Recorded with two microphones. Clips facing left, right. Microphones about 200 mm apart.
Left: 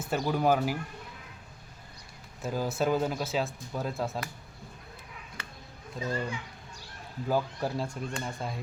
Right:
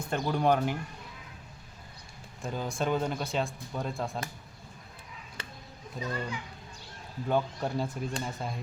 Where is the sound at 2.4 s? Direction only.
5° left (ahead or behind).